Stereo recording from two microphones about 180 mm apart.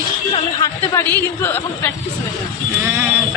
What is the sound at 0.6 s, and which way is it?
Speech, 15° left (ahead or behind).